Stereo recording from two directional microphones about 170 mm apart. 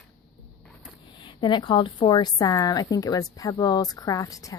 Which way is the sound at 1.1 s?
25° left (ahead or behind).